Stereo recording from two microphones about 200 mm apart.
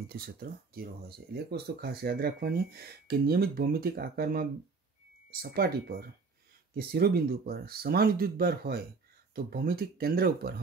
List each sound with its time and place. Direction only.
0.1 s speech: 50° right (ahead or behind)